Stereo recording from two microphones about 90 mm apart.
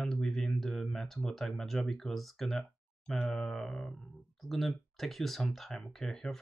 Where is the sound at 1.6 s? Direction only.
5° left (ahead or behind).